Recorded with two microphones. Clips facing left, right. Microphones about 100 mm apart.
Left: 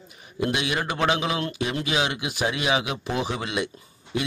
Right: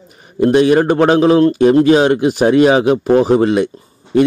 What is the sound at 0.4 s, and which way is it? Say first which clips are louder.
A man's voice: right 16 dB; 40° right (ahead or behind).